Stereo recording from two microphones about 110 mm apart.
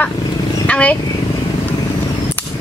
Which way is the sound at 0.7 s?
10° left (ahead or behind).